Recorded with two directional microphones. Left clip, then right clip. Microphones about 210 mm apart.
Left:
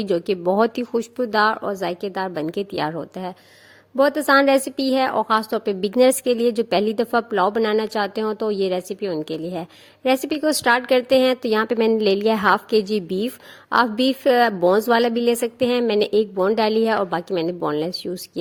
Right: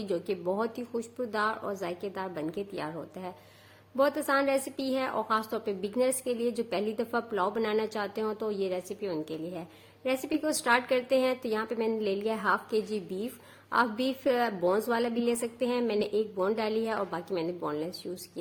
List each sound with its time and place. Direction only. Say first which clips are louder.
0.0 s a woman's voice: left 11 dB; 40° left (ahead or behind)